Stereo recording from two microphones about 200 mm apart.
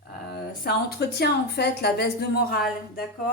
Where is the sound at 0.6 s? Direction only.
55° left (ahead or behind).